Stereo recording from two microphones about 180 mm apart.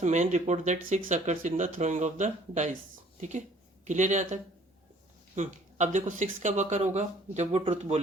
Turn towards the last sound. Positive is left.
turn(degrees=-35)  # may be behind; listen again after turning